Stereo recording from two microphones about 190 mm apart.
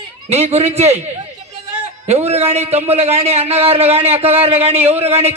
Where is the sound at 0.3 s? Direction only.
35° right (ahead or behind).